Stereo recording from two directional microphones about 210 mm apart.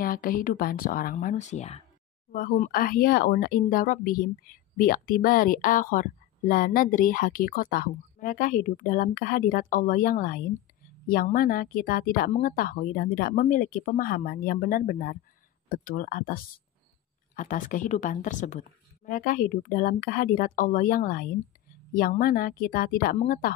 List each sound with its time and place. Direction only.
0.0 s speech: 40° left (ahead or behind)
2.3 s a woman's voice: 45° left (ahead or behind)